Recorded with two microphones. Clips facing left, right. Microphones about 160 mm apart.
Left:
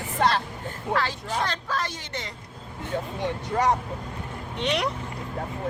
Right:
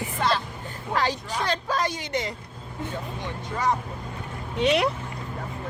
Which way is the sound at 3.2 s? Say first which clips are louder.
Left 3 dB; 75° left (ahead or behind).